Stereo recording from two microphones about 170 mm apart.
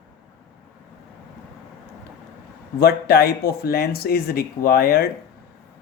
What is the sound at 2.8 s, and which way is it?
Speech, 65° left (ahead or behind).